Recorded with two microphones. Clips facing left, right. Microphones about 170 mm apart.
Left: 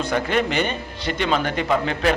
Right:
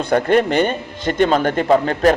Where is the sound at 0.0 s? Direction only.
55° right (ahead or behind).